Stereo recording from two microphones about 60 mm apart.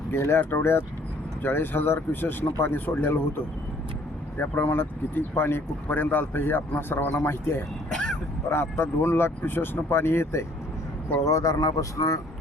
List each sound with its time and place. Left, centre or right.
0.1 s speech: left
4.4 s speech: left
7.9 s vehicle: centre
8.4 s speech: left
11.3 s speech: left